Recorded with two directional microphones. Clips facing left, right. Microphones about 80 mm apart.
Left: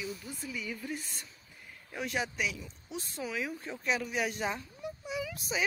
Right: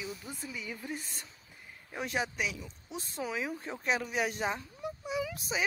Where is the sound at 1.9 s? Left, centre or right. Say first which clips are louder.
Even; right.